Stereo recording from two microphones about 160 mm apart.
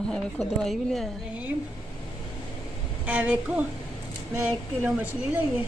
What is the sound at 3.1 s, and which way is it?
Speech, 10° right (ahead or behind).